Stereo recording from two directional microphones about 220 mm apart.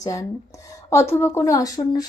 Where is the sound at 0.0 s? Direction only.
15° left (ahead or behind).